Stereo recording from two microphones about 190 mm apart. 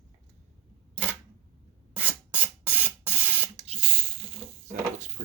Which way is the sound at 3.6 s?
30° right (ahead or behind).